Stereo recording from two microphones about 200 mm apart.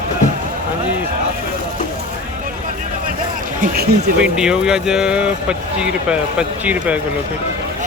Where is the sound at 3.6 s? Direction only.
50° right (ahead or behind).